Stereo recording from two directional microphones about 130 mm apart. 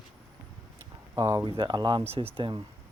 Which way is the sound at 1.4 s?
40° right (ahead or behind).